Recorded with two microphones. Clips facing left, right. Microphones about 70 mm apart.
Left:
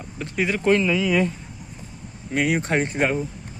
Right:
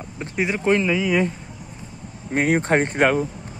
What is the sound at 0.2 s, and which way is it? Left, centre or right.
Speech, right.